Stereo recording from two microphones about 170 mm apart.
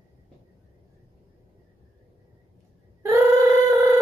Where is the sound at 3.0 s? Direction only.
15° right (ahead or behind).